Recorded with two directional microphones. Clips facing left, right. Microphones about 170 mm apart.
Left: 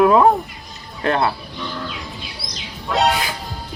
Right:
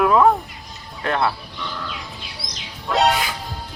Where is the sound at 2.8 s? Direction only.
Centre (ahead or behind).